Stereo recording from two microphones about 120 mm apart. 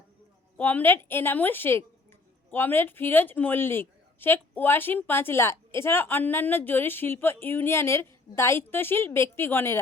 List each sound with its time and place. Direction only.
0.5 s a woman's voice: 15° left (ahead or behind)